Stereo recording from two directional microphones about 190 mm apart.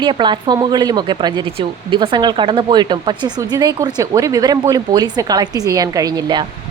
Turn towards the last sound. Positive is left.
turn(degrees=-20)  # may be behind; listen again after turning